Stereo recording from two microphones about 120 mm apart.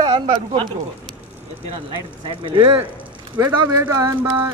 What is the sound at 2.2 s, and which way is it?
Speech, 45° right (ahead or behind).